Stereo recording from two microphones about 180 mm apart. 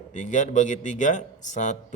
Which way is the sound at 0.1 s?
45° left (ahead or behind).